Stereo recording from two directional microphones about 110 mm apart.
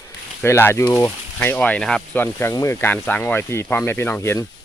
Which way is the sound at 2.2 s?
20° left (ahead or behind).